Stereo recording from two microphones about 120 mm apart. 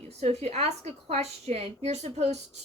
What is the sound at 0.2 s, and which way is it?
A woman's voice, 65° right (ahead or behind).